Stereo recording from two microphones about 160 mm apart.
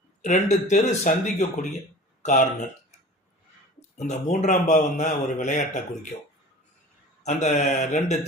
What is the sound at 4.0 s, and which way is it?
Speech, 45° left (ahead or behind).